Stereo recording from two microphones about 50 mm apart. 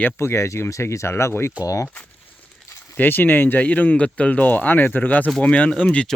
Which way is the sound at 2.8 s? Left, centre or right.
Left.